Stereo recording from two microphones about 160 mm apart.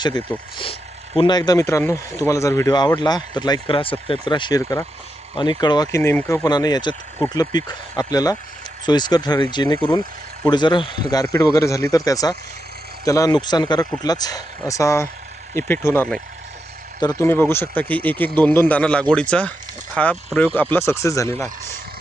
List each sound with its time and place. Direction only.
0.5 s speech: 35° left (ahead or behind)
6.0 s speech: 15° left (ahead or behind)
17.0 s speech: 25° left (ahead or behind)
17.2 s speech: 15° left (ahead or behind)